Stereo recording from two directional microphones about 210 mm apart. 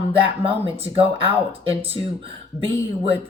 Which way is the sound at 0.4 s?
25° right (ahead or behind).